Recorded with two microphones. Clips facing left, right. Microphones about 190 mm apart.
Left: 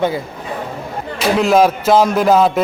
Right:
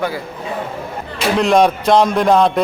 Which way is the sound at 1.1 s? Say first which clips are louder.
Left 1 dB; 5° left (ahead or behind).